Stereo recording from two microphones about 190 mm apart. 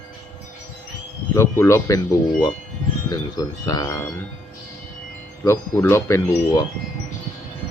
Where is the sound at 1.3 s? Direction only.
15° left (ahead or behind).